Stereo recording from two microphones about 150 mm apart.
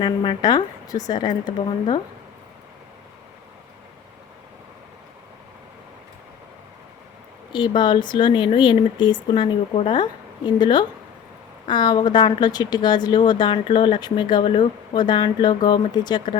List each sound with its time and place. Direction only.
0.0 s speech: 30° left (ahead or behind)
7.5 s speech: 30° left (ahead or behind)